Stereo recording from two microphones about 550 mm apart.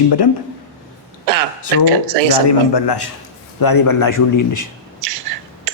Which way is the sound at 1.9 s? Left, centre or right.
Right.